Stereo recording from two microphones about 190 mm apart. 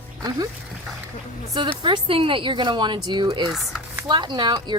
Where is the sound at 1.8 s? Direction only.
25° right (ahead or behind).